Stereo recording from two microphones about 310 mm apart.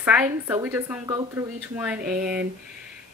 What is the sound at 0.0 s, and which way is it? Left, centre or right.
A woman's voice, centre.